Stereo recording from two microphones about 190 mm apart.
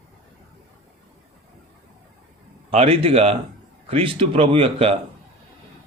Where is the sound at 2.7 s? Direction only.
30° right (ahead or behind).